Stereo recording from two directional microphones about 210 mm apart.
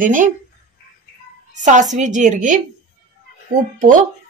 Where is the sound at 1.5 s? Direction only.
35° right (ahead or behind).